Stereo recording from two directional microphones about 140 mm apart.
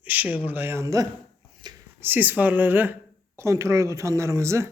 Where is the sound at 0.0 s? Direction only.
10° right (ahead or behind).